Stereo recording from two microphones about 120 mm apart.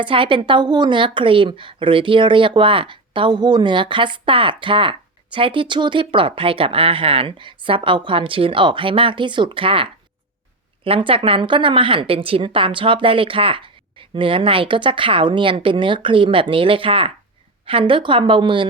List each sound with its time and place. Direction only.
0.0 s a woman's voice: 45° right (ahead or behind)